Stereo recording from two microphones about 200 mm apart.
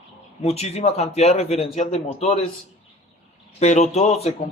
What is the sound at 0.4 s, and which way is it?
A man's voice, 30° left (ahead or behind).